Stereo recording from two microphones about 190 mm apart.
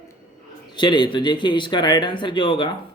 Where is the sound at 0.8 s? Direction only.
25° left (ahead or behind).